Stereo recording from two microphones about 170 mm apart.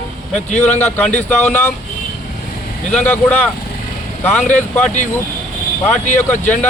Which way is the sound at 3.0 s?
10° left (ahead or behind).